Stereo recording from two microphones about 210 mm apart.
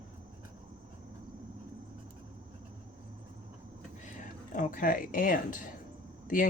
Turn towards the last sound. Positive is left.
turn(degrees=40)  # may be behind; listen again after turning